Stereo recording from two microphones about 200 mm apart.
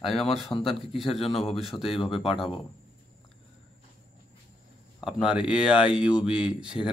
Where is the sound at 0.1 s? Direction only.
Centre (ahead or behind).